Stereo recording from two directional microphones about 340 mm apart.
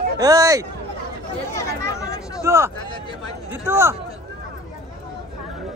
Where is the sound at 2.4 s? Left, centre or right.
Centre.